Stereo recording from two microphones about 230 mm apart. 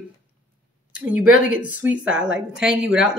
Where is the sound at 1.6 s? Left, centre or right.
Centre.